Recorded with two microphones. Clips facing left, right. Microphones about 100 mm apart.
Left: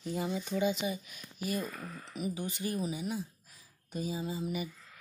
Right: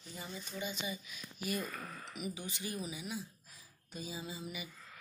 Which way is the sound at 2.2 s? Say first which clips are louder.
Left 7 dB; 35° left (ahead or behind).